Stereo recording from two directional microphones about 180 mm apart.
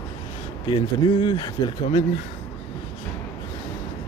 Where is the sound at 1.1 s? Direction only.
30° left (ahead or behind).